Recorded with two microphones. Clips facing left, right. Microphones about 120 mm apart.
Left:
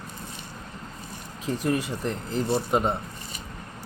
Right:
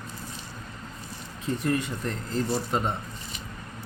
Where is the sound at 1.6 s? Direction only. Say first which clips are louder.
Left 2 dB; 5° left (ahead or behind).